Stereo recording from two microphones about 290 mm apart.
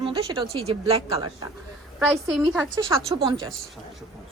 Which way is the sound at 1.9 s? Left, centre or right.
Centre.